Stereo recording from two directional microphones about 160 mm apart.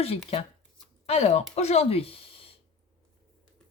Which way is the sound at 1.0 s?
45° left (ahead or behind).